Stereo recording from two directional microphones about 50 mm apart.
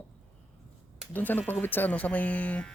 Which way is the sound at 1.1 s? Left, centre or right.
Left.